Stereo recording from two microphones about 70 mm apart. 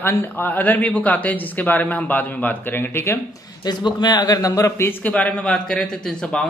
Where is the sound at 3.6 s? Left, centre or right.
Left.